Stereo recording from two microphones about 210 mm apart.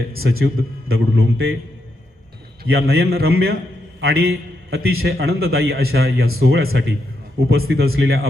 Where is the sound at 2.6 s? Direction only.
50° right (ahead or behind).